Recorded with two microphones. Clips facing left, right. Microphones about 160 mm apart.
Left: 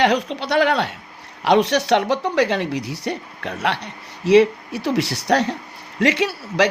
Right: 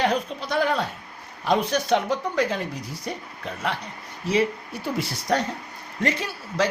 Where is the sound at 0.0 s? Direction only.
80° left.